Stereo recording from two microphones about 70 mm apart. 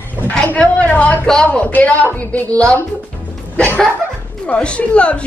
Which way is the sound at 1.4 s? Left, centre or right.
Left.